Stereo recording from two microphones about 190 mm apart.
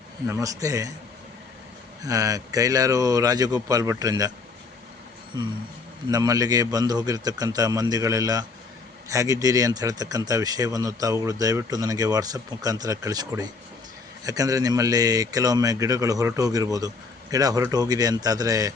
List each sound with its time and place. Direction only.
0.3 s speech: 15° right (ahead or behind)
2.0 s a man's voice: 20° right (ahead or behind)
5.3 s a man's voice: 20° right (ahead or behind)